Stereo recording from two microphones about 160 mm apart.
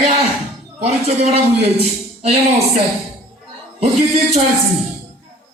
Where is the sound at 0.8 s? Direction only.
40° right (ahead or behind).